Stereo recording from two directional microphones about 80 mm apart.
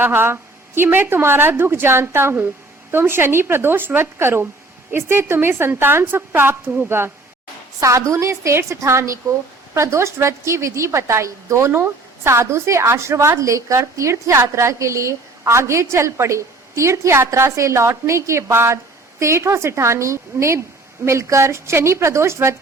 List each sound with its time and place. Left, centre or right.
0.0 s a woman's voice: right
7.8 s a woman's voice: right